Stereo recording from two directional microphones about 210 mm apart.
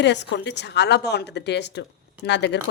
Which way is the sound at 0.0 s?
55° left (ahead or behind).